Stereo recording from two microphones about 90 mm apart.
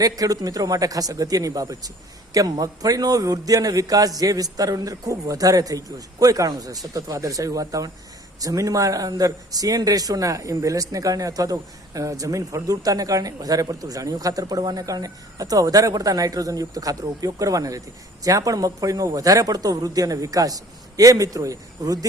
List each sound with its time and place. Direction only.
0.0 s a man's voice: 40° right (ahead or behind)